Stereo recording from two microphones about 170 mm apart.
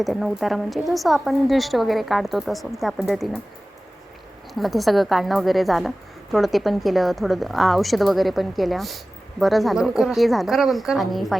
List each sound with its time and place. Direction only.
0.0 s a woman's voice: centre (ahead or behind)
4.5 s a woman's voice: centre (ahead or behind)